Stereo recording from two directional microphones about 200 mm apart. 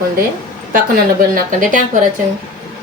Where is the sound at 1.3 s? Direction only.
40° right (ahead or behind).